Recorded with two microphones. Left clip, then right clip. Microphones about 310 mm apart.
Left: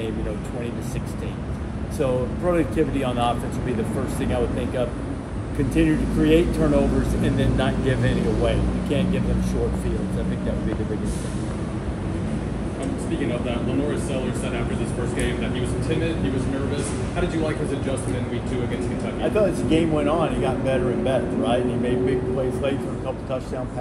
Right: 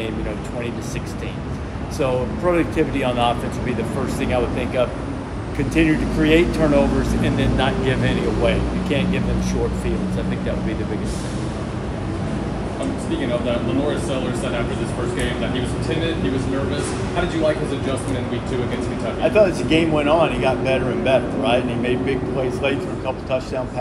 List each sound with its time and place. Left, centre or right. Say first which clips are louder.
2.0 s speech: right 2 dB; centre
19.3 s speech: right 4 dB; centre